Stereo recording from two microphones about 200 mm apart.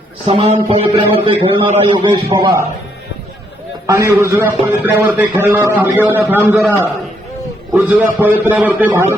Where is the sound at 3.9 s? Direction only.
15° right (ahead or behind).